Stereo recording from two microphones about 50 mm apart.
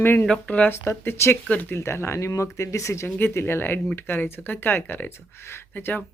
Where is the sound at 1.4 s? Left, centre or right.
Left.